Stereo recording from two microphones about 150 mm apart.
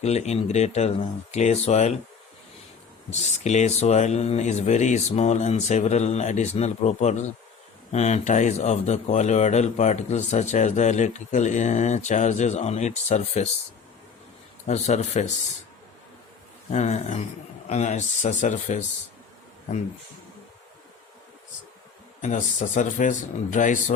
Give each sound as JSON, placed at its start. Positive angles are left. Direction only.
{"t": 0.0, "sound": "speech", "side_deg": 45}
{"t": 3.1, "sound": "speech", "side_deg": 50}
{"t": 14.7, "sound": "speech", "side_deg": 50}
{"t": 16.7, "sound": "speech", "side_deg": 50}
{"t": 22.2, "sound": "speech", "side_deg": 55}